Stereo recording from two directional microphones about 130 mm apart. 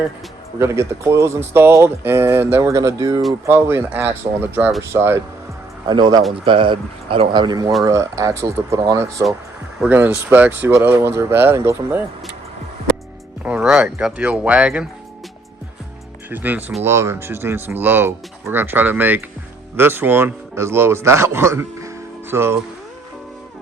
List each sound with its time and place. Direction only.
0.6 s a man's voice: 20° right (ahead or behind)
5.9 s a man's voice: 35° right (ahead or behind); by 12.0 s 15° right (ahead or behind)
13.4 s speech: 5° right (ahead or behind)
16.3 s a man's voice: 15° right (ahead or behind)